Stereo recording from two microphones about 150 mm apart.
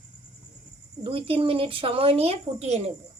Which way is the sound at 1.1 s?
35° right (ahead or behind).